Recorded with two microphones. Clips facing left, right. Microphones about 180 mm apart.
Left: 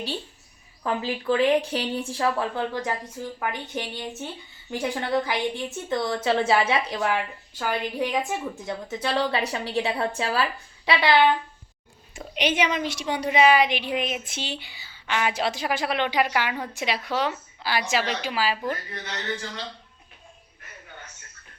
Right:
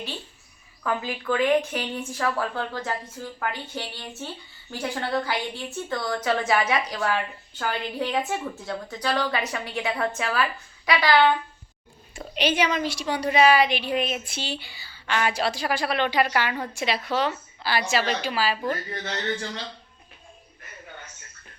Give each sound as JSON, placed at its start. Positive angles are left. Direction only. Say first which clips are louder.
{"t": 0.9, "sound": "speech", "louder": "left 2 dB", "side_deg": 30}
{"t": 7.6, "sound": "speech", "louder": "left 1 dB", "side_deg": 10}
{"t": 12.3, "sound": "a woman's voice", "louder": "right 1 dB", "side_deg": 20}